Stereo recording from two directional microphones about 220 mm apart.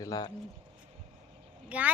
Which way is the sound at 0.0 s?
15° left (ahead or behind).